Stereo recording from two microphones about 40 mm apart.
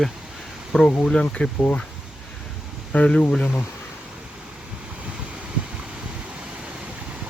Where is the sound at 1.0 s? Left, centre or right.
Left.